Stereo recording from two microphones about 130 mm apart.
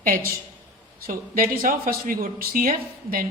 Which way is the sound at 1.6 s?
90° right.